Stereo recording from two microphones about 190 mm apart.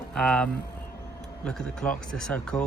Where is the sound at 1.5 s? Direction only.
5° left (ahead or behind).